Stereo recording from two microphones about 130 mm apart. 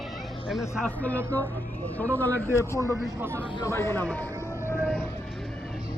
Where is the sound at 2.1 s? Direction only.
15° left (ahead or behind).